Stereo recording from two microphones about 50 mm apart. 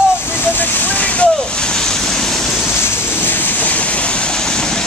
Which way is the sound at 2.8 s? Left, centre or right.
Left.